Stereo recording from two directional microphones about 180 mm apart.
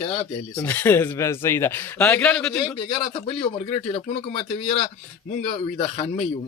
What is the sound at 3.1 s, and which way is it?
Speech, 35° left (ahead or behind).